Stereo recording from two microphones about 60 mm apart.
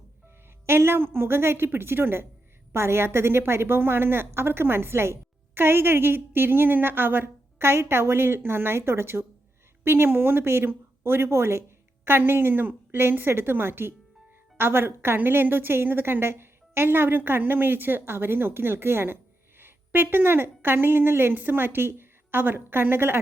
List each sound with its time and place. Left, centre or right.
0.6 s a woman's voice: right